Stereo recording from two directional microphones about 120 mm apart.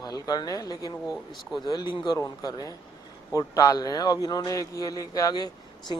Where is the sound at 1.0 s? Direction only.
5° right (ahead or behind).